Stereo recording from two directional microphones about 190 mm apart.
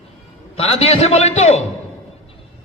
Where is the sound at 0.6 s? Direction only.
30° left (ahead or behind).